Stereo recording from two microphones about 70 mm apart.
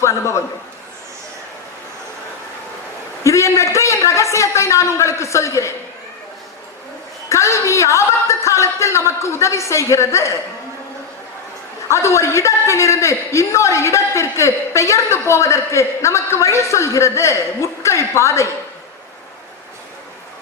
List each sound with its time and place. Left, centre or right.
0.0 s a man's voice: left
3.2 s a man's voice: left
7.3 s a man's voice: left
11.9 s a man's voice: left